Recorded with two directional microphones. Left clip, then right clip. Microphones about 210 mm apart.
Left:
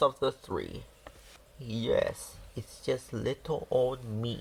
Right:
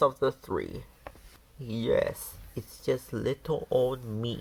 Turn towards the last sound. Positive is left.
turn(degrees=-30)  # may be behind; listen again after turning